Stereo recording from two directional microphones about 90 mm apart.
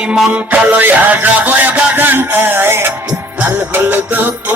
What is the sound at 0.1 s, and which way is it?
Music, 15° right (ahead or behind).